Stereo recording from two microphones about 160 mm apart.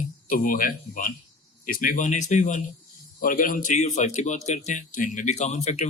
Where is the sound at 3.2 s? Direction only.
60° left (ahead or behind).